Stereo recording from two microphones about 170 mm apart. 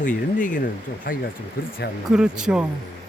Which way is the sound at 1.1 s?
60° left (ahead or behind).